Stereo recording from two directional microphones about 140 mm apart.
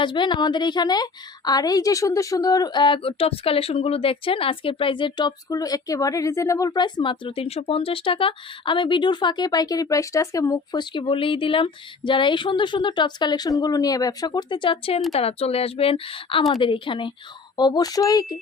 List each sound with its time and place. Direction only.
0.0 s a woman's voice: 35° left (ahead or behind)